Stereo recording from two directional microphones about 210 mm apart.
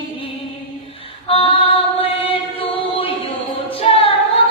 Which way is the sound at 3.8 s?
25° left (ahead or behind).